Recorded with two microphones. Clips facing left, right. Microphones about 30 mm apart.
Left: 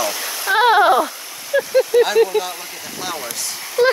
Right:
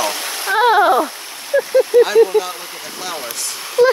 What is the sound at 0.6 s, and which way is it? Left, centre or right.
Speech, left.